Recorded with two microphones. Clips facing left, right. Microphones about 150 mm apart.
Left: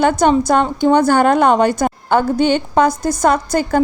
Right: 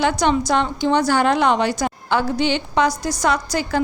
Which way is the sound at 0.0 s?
50° left (ahead or behind).